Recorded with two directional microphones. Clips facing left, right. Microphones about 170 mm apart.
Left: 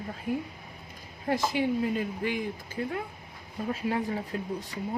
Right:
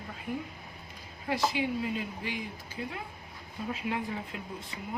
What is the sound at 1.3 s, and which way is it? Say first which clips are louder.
Speech: left 3 dB; 50° left (ahead or behind).